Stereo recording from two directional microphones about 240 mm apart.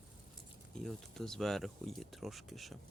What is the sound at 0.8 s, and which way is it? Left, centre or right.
Speech, centre.